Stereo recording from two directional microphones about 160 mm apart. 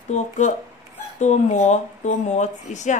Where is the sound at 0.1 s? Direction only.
50° left (ahead or behind).